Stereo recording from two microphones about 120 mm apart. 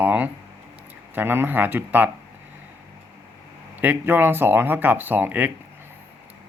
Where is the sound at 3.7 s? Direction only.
15° right (ahead or behind).